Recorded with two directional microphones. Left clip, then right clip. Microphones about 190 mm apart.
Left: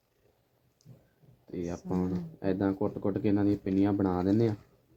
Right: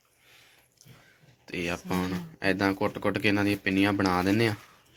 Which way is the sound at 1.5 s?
30° right (ahead or behind).